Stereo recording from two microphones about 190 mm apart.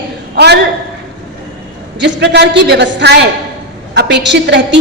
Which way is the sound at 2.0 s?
65° right (ahead or behind).